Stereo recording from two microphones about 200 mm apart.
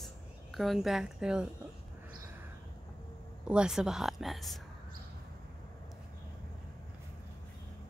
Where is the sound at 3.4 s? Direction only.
5° right (ahead or behind).